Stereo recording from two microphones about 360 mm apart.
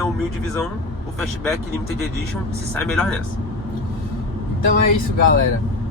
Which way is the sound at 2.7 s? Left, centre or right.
Centre.